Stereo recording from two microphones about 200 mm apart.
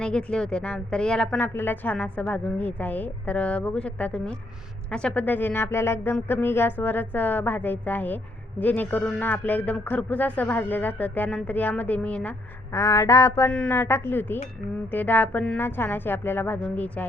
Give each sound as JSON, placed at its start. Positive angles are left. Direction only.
{"t": 0.0, "sound": "a woman's voice", "side_deg": 5}